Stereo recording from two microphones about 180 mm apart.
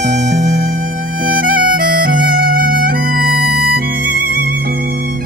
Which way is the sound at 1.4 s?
55° right (ahead or behind).